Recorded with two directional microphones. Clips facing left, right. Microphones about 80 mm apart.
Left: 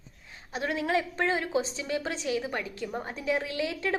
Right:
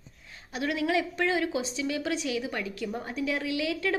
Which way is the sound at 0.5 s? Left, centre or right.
Left.